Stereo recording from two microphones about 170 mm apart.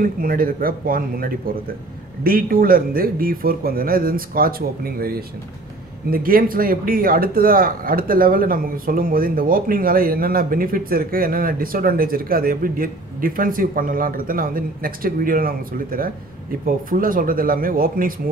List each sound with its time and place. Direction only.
0.0 s a man's voice: 55° right (ahead or behind)